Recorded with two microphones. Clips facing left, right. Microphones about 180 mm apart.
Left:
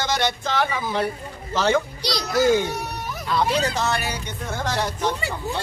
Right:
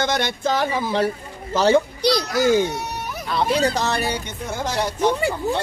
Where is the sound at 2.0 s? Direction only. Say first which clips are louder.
Right 8 dB; 55° right (ahead or behind).